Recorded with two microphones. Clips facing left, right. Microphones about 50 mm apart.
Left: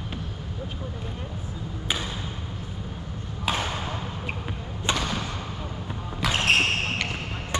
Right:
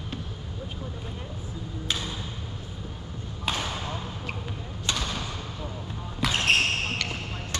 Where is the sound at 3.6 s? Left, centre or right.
Left.